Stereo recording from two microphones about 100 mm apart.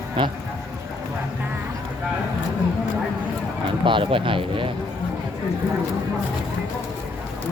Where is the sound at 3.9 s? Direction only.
60° right (ahead or behind).